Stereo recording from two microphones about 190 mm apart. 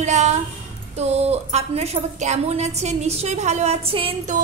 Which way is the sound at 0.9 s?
35° right (ahead or behind).